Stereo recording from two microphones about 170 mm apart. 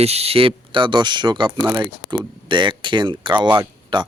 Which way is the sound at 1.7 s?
30° right (ahead or behind).